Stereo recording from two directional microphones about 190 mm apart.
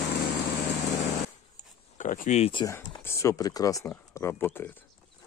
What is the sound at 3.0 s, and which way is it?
Speech, 15° left (ahead or behind).